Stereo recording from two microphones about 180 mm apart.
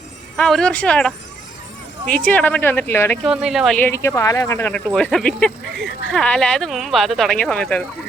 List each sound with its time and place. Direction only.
0.3 s speech: 5° left (ahead or behind)
3.2 s speech: 5° right (ahead or behind)
3.8 s speech: 15° left (ahead or behind)